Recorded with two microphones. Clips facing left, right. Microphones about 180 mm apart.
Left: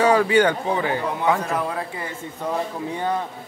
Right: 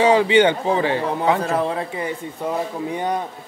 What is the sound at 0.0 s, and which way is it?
A man's voice, 20° right (ahead or behind).